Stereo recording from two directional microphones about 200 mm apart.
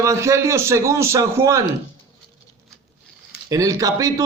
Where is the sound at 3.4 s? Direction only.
15° right (ahead or behind).